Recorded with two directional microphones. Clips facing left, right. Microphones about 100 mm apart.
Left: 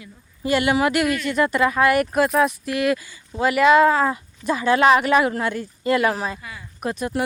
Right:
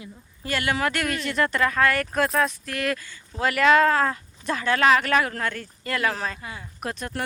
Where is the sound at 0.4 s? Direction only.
15° left (ahead or behind).